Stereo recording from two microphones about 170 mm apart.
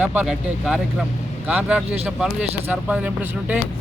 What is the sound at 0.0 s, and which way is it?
Speech, 10° right (ahead or behind).